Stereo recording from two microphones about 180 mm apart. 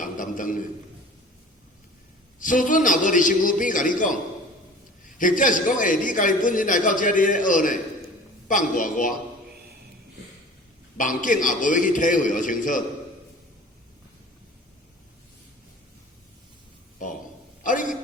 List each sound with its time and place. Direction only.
0.0 s a sound: 50° left (ahead or behind)
2.4 s a man's voice: 45° left (ahead or behind)
10.9 s a man's voice: 45° left (ahead or behind)
17.6 s a man's voice: 45° left (ahead or behind)